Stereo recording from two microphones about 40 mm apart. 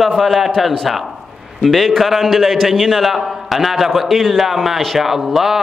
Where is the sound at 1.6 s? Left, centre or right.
Centre.